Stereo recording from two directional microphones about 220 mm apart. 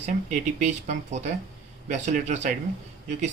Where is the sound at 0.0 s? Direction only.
30° right (ahead or behind).